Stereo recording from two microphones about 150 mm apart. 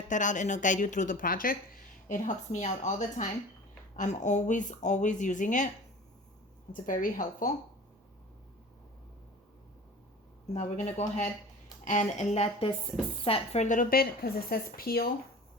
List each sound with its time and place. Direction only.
0.1 s speech: 55° left (ahead or behind)
6.7 s speech: 65° left (ahead or behind)
10.5 s a woman's voice: 50° left (ahead or behind); by 15.1 s 90° left